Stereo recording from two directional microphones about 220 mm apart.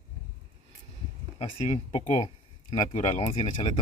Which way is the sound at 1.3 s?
25° left (ahead or behind).